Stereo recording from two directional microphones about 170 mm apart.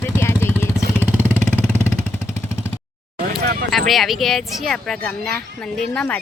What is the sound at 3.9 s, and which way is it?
Speech, centre (ahead or behind).